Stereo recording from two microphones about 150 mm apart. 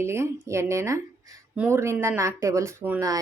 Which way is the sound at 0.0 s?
15° right (ahead or behind).